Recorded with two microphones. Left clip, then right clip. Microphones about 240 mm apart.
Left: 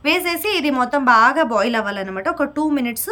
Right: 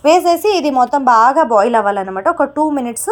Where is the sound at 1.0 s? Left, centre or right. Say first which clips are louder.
Right 2 dB; centre.